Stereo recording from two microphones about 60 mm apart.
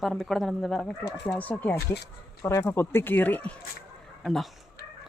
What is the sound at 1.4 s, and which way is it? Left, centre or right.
Speech, left.